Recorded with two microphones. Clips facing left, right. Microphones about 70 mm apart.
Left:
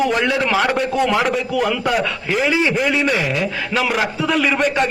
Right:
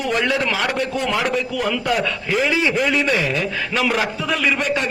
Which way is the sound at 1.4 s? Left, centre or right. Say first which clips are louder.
Left 3 dB; centre.